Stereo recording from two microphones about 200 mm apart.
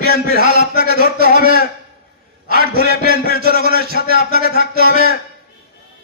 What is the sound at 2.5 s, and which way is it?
A man's voice, 50° left (ahead or behind).